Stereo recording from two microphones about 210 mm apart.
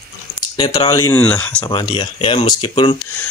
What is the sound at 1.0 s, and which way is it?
Speech, 5° left (ahead or behind).